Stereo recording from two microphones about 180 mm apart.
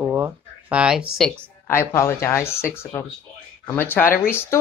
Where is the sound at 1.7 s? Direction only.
15° left (ahead or behind).